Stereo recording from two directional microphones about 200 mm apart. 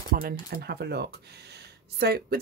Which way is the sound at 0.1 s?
45° right (ahead or behind).